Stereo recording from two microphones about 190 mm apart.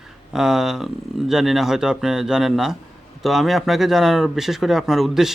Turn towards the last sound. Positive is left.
turn(degrees=0)  # may be behind; listen again after turning